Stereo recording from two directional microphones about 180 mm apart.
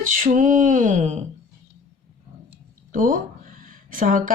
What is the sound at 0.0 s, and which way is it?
Speech, 45° right (ahead or behind).